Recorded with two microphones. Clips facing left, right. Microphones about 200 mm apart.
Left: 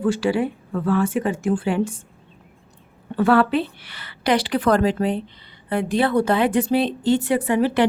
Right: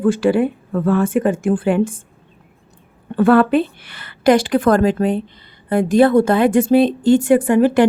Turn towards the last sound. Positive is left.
turn(degrees=-50)  # may be behind; listen again after turning